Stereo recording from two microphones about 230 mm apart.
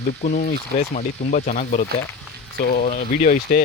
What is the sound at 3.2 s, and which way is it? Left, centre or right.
Speech, left.